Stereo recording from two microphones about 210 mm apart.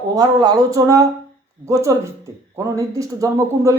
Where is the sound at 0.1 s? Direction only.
20° right (ahead or behind).